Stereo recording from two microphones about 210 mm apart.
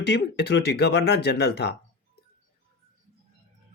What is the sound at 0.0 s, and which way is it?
Speech, 55° left (ahead or behind).